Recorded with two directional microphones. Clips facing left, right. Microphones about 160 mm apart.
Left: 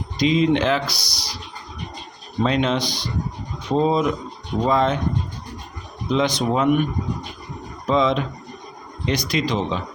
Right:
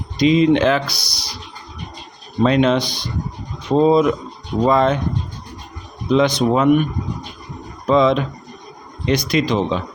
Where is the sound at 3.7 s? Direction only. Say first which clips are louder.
Right 5 dB; 70° right (ahead or behind).